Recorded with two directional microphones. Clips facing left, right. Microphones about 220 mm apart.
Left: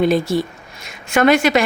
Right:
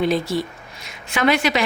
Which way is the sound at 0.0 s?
50° left (ahead or behind).